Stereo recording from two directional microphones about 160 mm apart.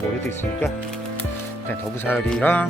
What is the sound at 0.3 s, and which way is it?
Speech, 15° left (ahead or behind).